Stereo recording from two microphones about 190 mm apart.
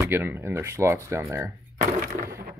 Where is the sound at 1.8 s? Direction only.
45° right (ahead or behind).